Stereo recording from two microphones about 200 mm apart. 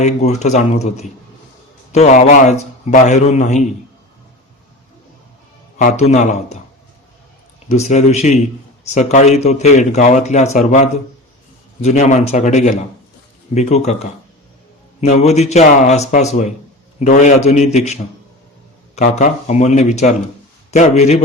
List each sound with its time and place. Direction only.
0.0 s a man's voice: 35° left (ahead or behind)
5.7 s a man's voice: 35° left (ahead or behind)
7.7 s a man's voice: 35° left (ahead or behind)
11.8 s a man's voice: 35° left (ahead or behind)